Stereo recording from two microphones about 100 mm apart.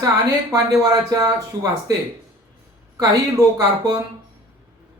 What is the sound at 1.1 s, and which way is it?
Speech, 40° right (ahead or behind).